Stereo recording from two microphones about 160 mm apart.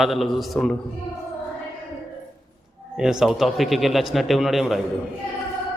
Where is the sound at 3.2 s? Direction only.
Centre (ahead or behind).